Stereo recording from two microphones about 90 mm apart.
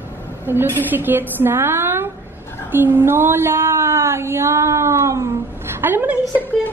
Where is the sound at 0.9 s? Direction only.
20° right (ahead or behind).